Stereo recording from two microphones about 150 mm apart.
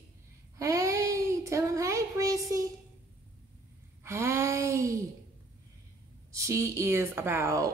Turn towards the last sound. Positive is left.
turn(degrees=-20)  # may be behind; listen again after turning